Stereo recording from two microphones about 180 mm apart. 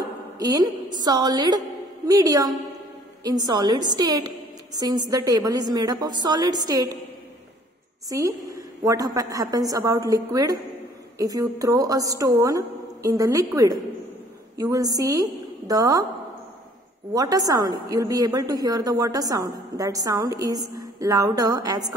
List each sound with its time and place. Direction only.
0.4 s a woman's voice: 20° right (ahead or behind)
8.5 s a woman's voice: 20° right (ahead or behind)
17.1 s a woman's voice: 20° right (ahead or behind)